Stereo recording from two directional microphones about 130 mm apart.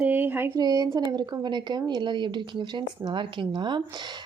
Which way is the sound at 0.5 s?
30° right (ahead or behind).